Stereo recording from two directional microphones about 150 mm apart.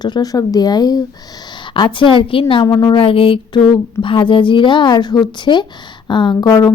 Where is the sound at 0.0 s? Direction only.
25° left (ahead or behind).